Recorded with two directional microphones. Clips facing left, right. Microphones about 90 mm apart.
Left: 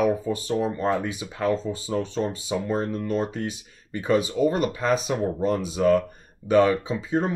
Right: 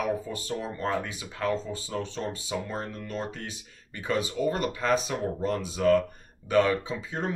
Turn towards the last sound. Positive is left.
turn(degrees=20)  # may be behind; listen again after turning